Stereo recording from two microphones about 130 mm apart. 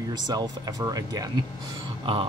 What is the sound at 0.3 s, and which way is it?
Speech, 30° right (ahead or behind).